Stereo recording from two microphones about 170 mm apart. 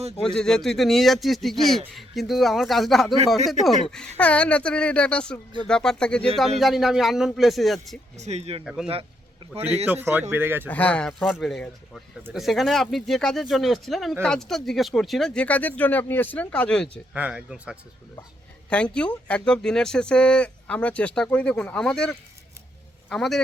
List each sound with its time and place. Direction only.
0.2 s a woman's voice: 5° left (ahead or behind)
8.1 s speech: 40° right (ahead or behind)
8.6 s speech: 5° right (ahead or behind)
10.7 s a woman's voice: 10° left (ahead or behind)
17.2 s speech: 10° right (ahead or behind)
18.7 s speech: 5° left (ahead or behind)